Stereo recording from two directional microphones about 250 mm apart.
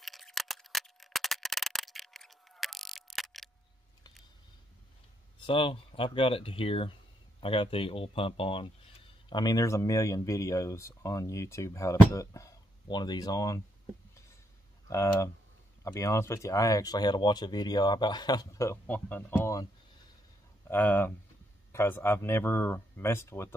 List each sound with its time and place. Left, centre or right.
0.0 s scissors: centre
5.5 s speech: left
14.9 s speech: centre
20.7 s speech: centre